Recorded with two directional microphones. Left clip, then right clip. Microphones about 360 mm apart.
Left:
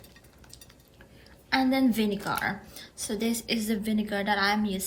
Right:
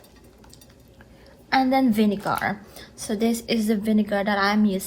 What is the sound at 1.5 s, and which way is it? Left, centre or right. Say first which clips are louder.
A woman's voice: right 5 dB; centre.